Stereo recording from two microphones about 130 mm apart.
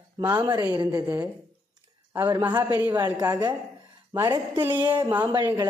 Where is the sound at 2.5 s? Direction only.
30° right (ahead or behind).